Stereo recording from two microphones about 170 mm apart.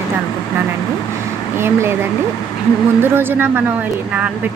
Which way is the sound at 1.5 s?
15° right (ahead or behind).